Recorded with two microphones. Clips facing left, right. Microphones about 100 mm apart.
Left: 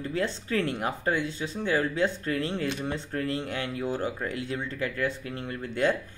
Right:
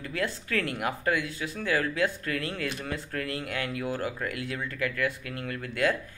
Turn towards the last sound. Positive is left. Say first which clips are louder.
# left 1 dB
turn(degrees=25)  # may be behind; listen again after turning